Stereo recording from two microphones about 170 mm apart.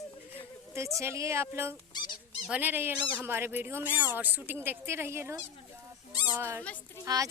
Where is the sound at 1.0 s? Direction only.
15° right (ahead or behind).